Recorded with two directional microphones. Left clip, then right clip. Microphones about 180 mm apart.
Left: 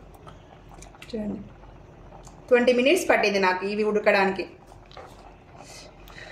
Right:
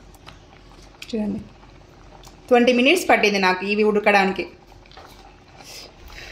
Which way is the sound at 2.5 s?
55° right (ahead or behind).